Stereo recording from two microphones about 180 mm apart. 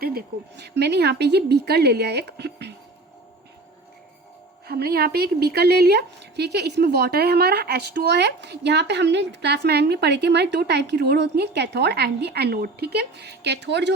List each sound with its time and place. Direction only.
0.0 s a woman's voice: 55° right (ahead or behind)
4.6 s a woman's voice: 60° right (ahead or behind)